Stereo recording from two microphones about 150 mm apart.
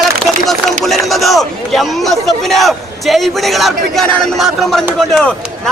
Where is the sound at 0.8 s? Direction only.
Centre (ahead or behind).